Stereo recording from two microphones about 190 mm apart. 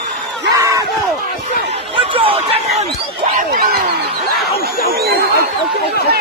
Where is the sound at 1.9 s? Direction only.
30° right (ahead or behind).